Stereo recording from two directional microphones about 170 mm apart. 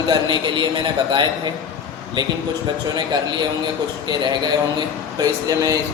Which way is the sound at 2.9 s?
25° right (ahead or behind).